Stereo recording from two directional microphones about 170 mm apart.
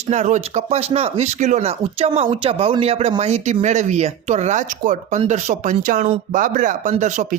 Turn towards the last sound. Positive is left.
turn(degrees=-45)  # may be behind; listen again after turning